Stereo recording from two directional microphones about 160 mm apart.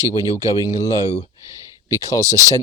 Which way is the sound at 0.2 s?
25° left (ahead or behind).